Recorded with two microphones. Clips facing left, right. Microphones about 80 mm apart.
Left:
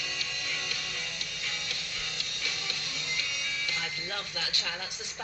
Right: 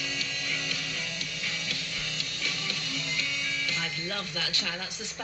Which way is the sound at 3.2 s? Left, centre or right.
Left.